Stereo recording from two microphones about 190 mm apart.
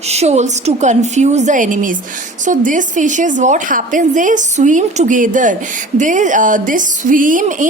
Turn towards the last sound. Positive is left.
turn(degrees=-45)  # may be behind; listen again after turning